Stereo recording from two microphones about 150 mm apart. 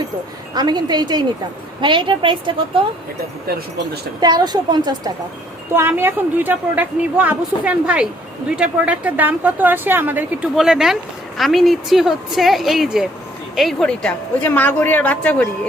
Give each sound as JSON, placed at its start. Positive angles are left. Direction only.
{"t": 0.5, "sound": "a woman's voice", "side_deg": -30}
{"t": 4.2, "sound": "a woman's voice", "side_deg": -25}
{"t": 5.7, "sound": "a woman's voice", "side_deg": -15}